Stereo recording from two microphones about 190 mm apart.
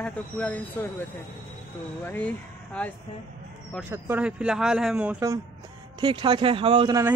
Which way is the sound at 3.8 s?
10° right (ahead or behind).